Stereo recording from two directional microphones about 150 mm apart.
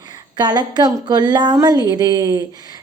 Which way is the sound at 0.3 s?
30° right (ahead or behind).